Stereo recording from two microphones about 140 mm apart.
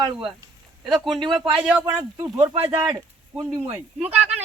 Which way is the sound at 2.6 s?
40° right (ahead or behind).